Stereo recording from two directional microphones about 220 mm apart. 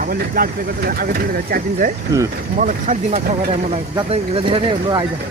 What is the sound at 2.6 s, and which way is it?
Speech, 35° right (ahead or behind).